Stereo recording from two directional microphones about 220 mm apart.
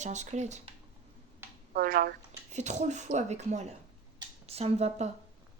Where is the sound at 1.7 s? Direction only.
40° right (ahead or behind).